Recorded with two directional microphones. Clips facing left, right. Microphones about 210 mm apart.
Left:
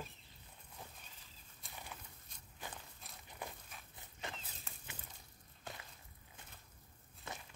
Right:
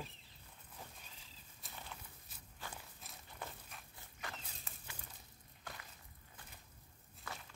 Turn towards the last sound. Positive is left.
turn(degrees=25)  # may be behind; listen again after turning